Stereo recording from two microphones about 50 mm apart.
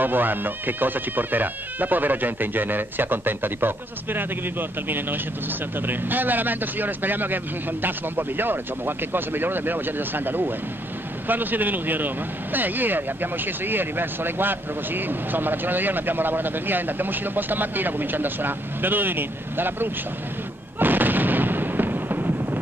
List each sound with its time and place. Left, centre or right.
0.0 s speech: right
20.8 s artillery fire: right